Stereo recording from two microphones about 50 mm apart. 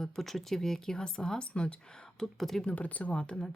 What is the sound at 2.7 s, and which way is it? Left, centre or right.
Speech, left.